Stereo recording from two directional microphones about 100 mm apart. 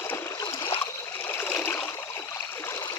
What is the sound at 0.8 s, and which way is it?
Stream, 30° left (ahead or behind).